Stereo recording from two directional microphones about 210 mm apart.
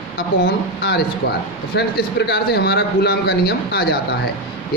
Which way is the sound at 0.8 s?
50° left (ahead or behind).